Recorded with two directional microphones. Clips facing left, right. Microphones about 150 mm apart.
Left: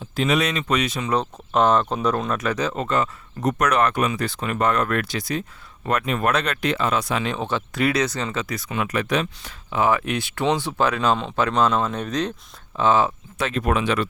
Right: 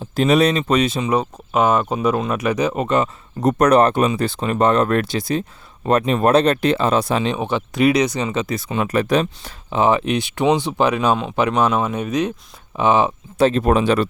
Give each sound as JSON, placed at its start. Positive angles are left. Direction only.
{"t": 0.2, "sound": "speech", "side_deg": -35}
{"t": 1.0, "sound": "speech", "side_deg": -10}
{"t": 3.4, "sound": "speech", "side_deg": -35}
{"t": 7.3, "sound": "speech", "side_deg": -15}
{"t": 13.4, "sound": "speech", "side_deg": -30}